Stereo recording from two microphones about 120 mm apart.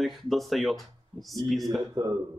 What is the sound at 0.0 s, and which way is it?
Speech, centre (ahead or behind).